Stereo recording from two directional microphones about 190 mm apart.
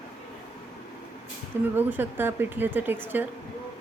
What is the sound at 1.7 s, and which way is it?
A woman's voice, 10° right (ahead or behind).